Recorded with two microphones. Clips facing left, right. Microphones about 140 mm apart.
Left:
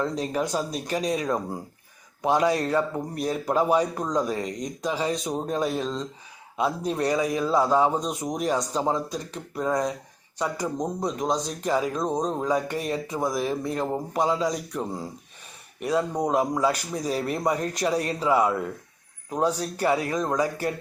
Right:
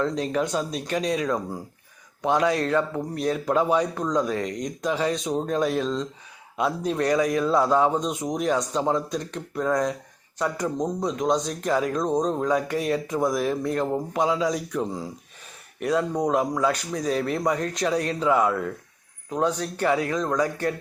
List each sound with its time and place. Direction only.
0.3 s speech: 5° left (ahead or behind)
2.2 s speech: 5° left (ahead or behind)